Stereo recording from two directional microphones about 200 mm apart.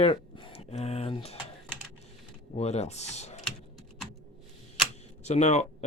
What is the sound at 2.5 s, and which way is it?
Speech, 35° left (ahead or behind).